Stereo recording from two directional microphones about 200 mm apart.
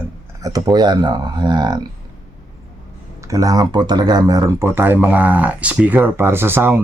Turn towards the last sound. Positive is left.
turn(degrees=-10)  # may be behind; listen again after turning